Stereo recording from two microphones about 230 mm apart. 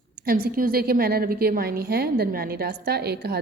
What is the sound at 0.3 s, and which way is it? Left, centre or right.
A woman's voice, right.